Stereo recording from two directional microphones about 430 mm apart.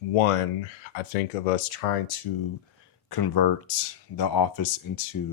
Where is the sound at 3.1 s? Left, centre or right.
Left.